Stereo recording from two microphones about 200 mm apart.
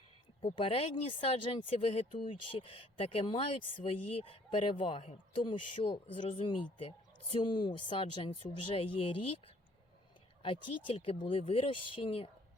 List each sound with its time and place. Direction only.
0.4 s speech: 30° left (ahead or behind)
10.4 s speech: 25° left (ahead or behind)